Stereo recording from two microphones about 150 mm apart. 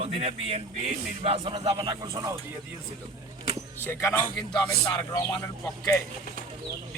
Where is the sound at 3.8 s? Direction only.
15° left (ahead or behind).